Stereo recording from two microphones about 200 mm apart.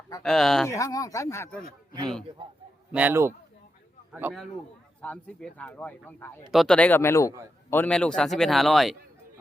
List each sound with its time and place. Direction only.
0.2 s a man's voice: 5° left (ahead or behind)
0.7 s speech: 15° left (ahead or behind)
2.9 s a man's voice: 10° right (ahead or behind)
5.0 s a man's voice: 5° left (ahead or behind)